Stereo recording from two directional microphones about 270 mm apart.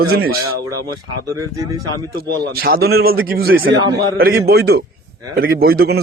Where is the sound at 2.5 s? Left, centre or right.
Right.